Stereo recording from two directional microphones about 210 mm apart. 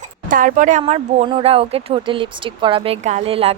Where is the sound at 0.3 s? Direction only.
40° right (ahead or behind).